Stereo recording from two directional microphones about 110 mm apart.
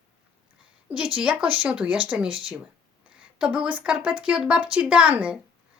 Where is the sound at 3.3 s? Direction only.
10° right (ahead or behind).